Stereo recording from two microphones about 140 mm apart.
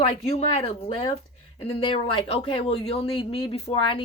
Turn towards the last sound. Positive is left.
turn(degrees=40)  # may be behind; listen again after turning